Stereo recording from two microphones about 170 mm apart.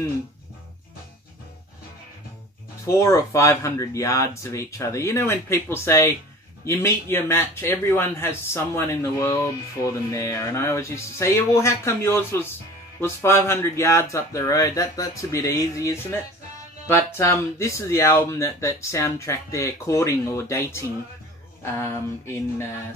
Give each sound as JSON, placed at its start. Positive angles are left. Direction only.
{"t": 2.9, "sound": "speech", "side_deg": 15}